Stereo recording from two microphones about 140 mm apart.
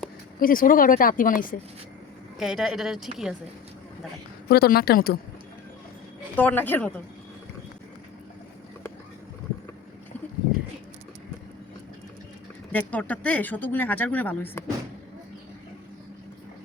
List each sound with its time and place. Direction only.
0.3 s a woman's voice: 85° left
2.4 s a woman's voice: centre (ahead or behind)
4.4 s a woman's voice: 90° left
6.3 s speech: 15° left (ahead or behind)
12.7 s speech: 10° left (ahead or behind)